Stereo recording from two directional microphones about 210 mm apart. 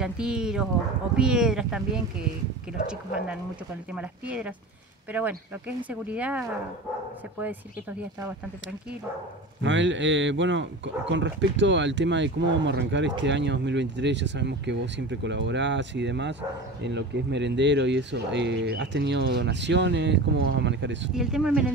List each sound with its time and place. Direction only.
0.0 s speech: 5° right (ahead or behind)
3.9 s speech: 5° right (ahead or behind)
9.6 s speech: 60° right (ahead or behind)
21.1 s speech: 5° right (ahead or behind)